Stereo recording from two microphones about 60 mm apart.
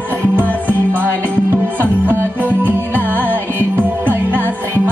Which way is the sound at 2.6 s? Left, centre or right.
Right.